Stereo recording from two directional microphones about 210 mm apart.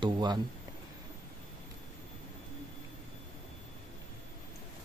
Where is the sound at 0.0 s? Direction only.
20° right (ahead or behind).